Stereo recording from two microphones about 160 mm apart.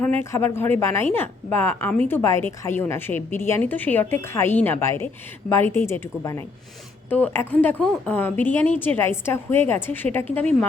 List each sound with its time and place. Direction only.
0.0 s a woman's voice: 10° left (ahead or behind)